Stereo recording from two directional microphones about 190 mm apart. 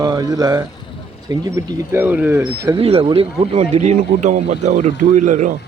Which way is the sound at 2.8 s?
30° right (ahead or behind).